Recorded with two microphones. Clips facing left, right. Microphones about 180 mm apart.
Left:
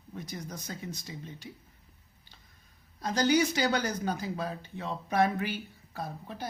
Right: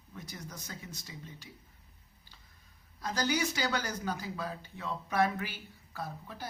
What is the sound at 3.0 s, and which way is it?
Speech, 20° left (ahead or behind).